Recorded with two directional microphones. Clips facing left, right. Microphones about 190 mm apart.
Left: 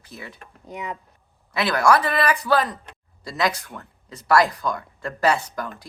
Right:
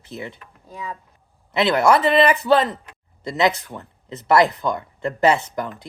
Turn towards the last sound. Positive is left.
turn(degrees=-20)  # may be behind; listen again after turning